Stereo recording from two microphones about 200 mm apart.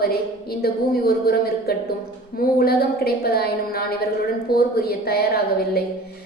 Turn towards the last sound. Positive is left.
turn(degrees=50)  # may be behind; listen again after turning